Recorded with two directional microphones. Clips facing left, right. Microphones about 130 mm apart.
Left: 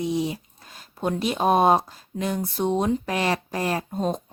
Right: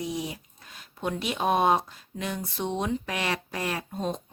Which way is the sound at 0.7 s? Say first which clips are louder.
Left 5 dB; 35° left (ahead or behind).